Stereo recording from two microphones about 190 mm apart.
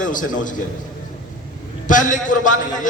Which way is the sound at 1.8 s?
40° left (ahead or behind).